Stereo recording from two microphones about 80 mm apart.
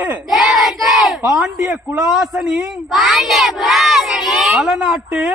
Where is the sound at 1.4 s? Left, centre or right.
Centre.